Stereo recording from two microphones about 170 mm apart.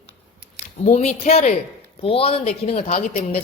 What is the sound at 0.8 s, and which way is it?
Speech, 40° left (ahead or behind).